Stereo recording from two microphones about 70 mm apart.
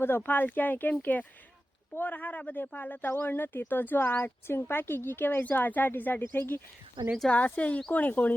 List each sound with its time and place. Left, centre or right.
0.0 s speech: left